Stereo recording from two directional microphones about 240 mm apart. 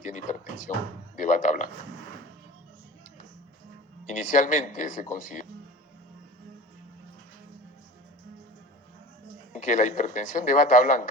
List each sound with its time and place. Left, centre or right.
0.0 s a sound: left
4.4 s a man's voice: left
9.5 s a man's voice: left